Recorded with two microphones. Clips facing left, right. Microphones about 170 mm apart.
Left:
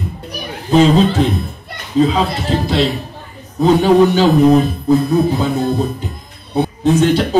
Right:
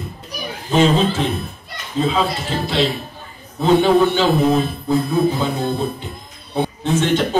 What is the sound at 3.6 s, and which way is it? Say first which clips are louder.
A man's voice: left 3 dB; 40° left (ahead or behind).